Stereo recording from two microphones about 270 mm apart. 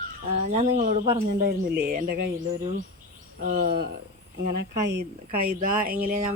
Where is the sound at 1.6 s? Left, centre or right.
Right.